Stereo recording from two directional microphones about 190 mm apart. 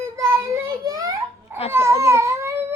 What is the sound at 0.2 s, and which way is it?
Child singing, 20° right (ahead or behind).